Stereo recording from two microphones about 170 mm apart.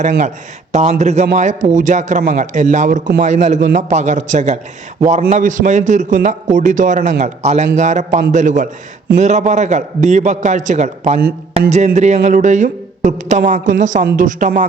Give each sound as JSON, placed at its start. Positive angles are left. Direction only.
{"t": 0.7, "sound": "a man's voice", "side_deg": -40}